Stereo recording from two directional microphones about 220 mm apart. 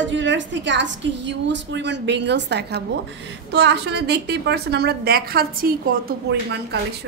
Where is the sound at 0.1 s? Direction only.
55° right (ahead or behind).